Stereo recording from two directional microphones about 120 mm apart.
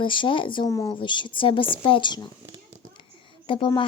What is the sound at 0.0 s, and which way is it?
Speech, 45° left (ahead or behind).